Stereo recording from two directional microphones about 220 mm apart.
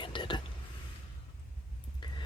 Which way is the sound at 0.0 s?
20° left (ahead or behind).